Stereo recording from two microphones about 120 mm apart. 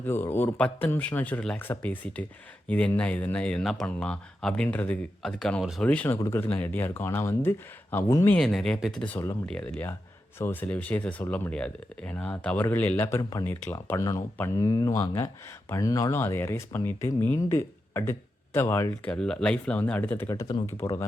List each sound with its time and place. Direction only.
0.0 s speech: 20° left (ahead or behind)
8.4 s speech: 5° left (ahead or behind)
10.3 s speech: 15° left (ahead or behind)
19.0 s speech: 10° left (ahead or behind)
20.3 s speech: 30° left (ahead or behind)